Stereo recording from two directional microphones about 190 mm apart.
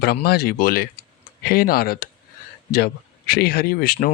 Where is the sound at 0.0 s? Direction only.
55° left (ahead or behind).